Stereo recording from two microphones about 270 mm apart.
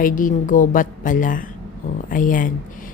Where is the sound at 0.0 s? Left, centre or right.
Left.